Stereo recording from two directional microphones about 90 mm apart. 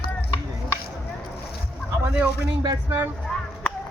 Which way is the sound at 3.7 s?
15° left (ahead or behind).